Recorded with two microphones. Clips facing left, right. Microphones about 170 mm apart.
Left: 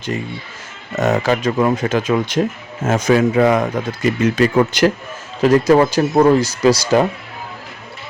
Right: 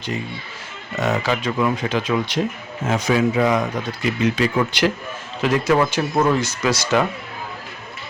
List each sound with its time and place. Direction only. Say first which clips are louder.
0.9 s speech: left 5 dB; 45° left (ahead or behind)